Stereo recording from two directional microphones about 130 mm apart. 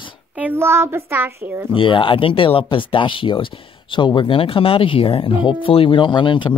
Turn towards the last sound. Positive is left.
turn(degrees=40)  # may be behind; listen again after turning